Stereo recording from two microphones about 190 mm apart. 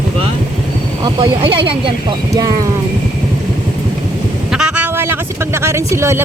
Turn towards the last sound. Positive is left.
turn(degrees=-15)  # may be behind; listen again after turning